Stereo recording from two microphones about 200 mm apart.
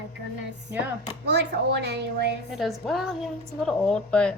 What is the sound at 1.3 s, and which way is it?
A woman's voice, 60° right (ahead or behind).